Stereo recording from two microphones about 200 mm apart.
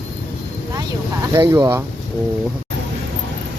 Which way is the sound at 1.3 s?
20° right (ahead or behind).